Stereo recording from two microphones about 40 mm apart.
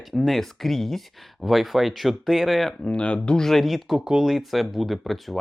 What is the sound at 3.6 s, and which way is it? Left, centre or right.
Speech, centre.